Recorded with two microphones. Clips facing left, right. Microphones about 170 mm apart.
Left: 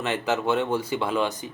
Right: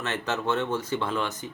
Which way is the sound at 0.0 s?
10° left (ahead or behind).